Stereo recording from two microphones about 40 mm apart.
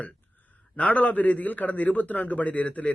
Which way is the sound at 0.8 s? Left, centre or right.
Left.